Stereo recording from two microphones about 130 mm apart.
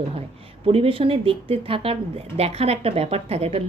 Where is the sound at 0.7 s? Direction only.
45° right (ahead or behind).